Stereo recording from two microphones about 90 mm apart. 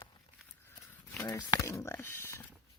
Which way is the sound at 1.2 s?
45° left (ahead or behind).